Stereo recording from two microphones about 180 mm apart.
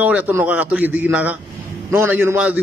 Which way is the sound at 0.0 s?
10° right (ahead or behind).